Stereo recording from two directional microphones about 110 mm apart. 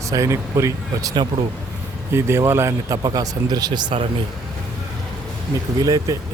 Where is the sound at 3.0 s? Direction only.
40° right (ahead or behind).